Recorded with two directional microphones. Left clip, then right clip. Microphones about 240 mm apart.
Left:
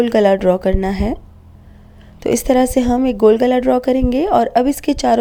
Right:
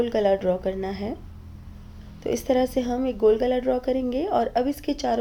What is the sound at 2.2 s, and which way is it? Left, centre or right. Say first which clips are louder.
Speech: left 8 dB; left.